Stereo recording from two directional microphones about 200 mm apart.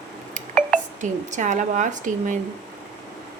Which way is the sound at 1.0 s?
40° right (ahead or behind).